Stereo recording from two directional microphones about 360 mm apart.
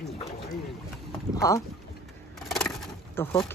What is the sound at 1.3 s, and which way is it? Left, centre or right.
Boat, centre.